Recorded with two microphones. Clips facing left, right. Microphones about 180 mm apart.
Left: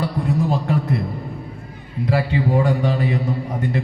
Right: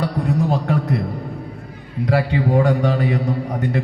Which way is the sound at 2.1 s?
60° right (ahead or behind).